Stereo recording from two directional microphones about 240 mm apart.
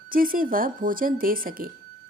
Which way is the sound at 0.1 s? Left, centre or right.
Right.